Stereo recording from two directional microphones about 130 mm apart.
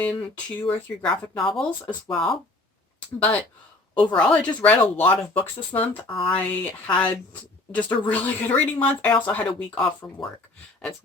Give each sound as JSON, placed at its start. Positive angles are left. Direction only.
{"t": 0.0, "sound": "speech", "side_deg": 10}
{"t": 0.6, "sound": "speech", "side_deg": 40}
{"t": 1.4, "sound": "speech", "side_deg": 0}
{"t": 3.2, "sound": "speech", "side_deg": 10}
{"t": 10.0, "sound": "speech", "side_deg": 30}